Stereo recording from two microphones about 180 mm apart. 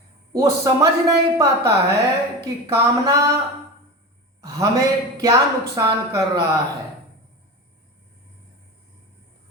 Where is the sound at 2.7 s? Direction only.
15° right (ahead or behind).